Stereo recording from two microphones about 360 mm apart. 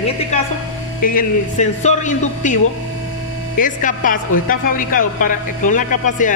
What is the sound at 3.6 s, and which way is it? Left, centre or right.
Speech, left.